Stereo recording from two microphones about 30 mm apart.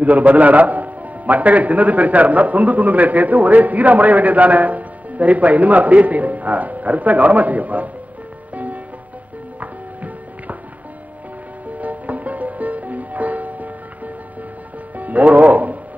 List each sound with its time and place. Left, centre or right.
0.0 s a man's voice: right
9.6 s music: right
11.8 s music: right